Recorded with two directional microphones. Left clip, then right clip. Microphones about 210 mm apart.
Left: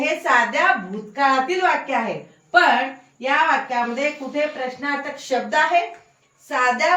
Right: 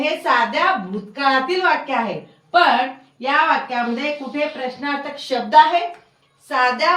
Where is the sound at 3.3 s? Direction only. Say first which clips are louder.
Right 1 dB; centre (ahead or behind).